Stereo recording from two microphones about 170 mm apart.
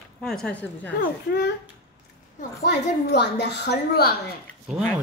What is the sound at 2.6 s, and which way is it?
A woman's voice, 80° left.